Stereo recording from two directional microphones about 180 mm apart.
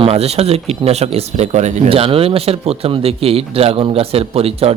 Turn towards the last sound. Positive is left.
turn(degrees=-35)  # may be behind; listen again after turning